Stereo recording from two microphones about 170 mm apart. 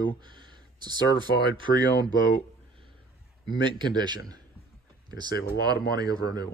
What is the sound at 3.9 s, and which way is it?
Speech, 25° right (ahead or behind).